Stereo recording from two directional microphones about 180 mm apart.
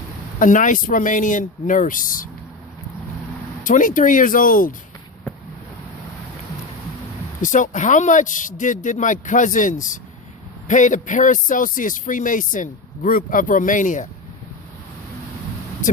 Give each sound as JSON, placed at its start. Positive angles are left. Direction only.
{"t": 0.3, "sound": "speech", "side_deg": 45}
{"t": 3.6, "sound": "speech", "side_deg": 45}
{"t": 7.4, "sound": "speech", "side_deg": 45}